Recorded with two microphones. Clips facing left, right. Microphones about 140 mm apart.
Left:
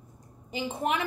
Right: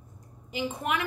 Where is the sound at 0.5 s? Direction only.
30° left (ahead or behind).